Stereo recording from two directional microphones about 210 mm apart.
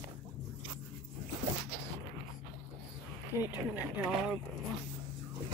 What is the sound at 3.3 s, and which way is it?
Speech, 10° right (ahead or behind).